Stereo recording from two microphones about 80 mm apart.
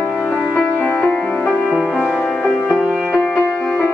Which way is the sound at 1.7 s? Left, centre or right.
Centre.